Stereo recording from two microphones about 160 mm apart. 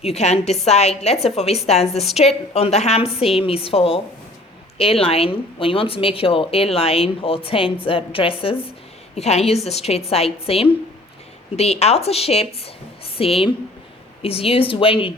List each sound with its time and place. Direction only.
0.0 s a woman's voice: 40° left (ahead or behind)